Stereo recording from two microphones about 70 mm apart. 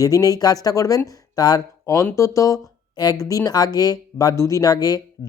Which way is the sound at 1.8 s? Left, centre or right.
Left.